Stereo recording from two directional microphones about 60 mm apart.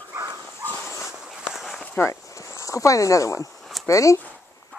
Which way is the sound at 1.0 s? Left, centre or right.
Centre.